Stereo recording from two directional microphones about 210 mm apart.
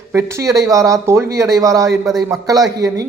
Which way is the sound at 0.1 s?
15° right (ahead or behind).